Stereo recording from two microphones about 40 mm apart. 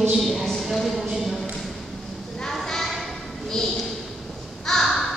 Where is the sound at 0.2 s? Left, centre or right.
Centre.